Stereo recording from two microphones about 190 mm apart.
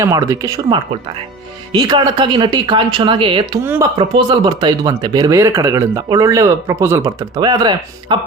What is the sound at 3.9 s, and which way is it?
Speech, 25° right (ahead or behind).